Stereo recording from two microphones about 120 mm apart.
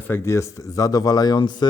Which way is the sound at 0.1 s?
25° left (ahead or behind).